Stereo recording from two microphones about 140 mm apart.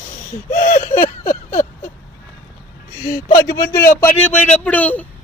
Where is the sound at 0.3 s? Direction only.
65° left (ahead or behind).